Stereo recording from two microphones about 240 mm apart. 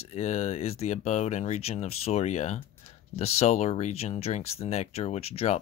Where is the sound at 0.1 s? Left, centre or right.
Left.